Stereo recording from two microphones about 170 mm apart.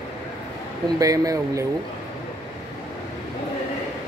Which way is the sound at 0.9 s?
20° right (ahead or behind).